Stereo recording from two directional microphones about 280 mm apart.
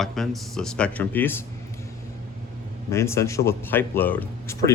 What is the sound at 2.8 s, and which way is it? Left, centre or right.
Speech, centre.